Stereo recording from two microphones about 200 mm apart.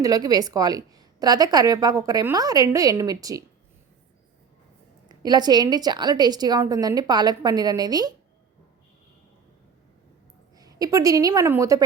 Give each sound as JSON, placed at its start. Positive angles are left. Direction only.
{"t": 0.0, "sound": "a woman's voice", "side_deg": -20}
{"t": 5.0, "sound": "a woman's voice", "side_deg": -20}
{"t": 10.6, "sound": "a woman's voice", "side_deg": -20}